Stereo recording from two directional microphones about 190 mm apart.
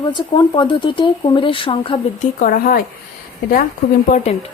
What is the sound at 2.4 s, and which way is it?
Speech, 50° left (ahead or behind).